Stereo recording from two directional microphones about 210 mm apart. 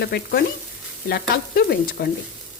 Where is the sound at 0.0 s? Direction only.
50° left (ahead or behind).